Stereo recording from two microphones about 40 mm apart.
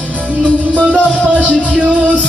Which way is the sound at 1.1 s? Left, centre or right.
Right.